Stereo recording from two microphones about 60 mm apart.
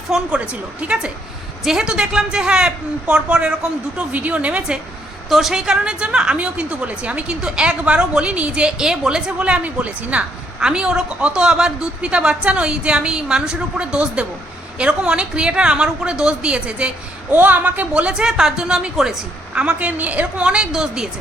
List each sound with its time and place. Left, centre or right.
0.3 s a woman's voice: right
4.1 s a woman's voice: right
5.3 s a woman's voice: centre
17.3 s a woman's voice: right
18.1 s a woman's voice: centre
20.0 s a woman's voice: right; by 21.1 s centre